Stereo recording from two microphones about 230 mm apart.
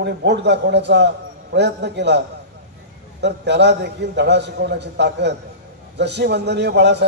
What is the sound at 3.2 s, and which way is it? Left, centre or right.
A man's voice, right.